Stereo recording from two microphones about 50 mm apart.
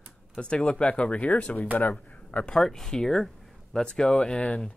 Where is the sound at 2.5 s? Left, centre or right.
Centre.